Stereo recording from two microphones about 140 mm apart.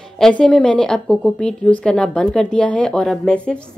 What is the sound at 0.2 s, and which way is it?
A woman's voice, 5° left (ahead or behind).